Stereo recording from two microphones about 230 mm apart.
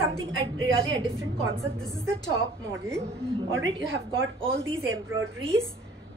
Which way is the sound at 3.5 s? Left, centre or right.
Right.